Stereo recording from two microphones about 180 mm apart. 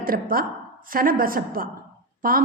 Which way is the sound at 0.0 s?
50° right (ahead or behind).